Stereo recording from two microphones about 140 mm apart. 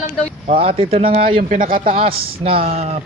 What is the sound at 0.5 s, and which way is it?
Speech, 40° right (ahead or behind).